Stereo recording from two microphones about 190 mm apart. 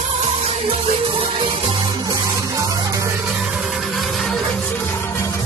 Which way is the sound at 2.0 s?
20° right (ahead or behind).